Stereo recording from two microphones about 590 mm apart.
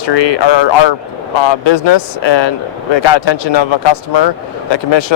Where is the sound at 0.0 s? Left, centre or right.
Left.